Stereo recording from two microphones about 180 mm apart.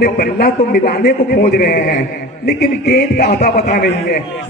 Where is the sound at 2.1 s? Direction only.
65° left (ahead or behind).